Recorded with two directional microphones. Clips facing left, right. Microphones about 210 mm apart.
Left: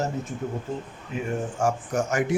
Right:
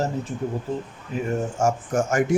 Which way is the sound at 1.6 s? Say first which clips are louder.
Right 2 dB; 45° right (ahead or behind).